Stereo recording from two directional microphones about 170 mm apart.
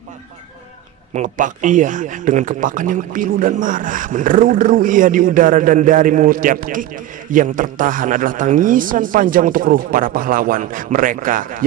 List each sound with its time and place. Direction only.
1.1 s speech: 50° right (ahead or behind)